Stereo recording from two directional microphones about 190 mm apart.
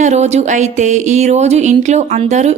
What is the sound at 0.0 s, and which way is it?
Speech, 35° right (ahead or behind).